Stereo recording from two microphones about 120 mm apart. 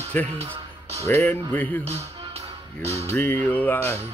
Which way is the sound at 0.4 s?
60° right (ahead or behind).